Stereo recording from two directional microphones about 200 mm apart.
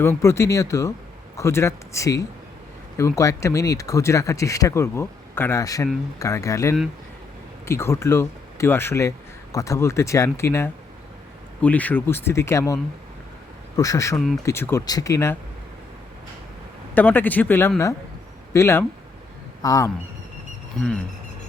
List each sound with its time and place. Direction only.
0.0 s speech: 15° left (ahead or behind)
16.9 s speech: 10° left (ahead or behind)